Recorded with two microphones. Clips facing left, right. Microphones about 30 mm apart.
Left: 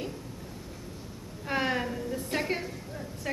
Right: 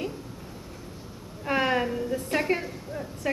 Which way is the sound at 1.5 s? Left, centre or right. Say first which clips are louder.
Right 4 dB; centre.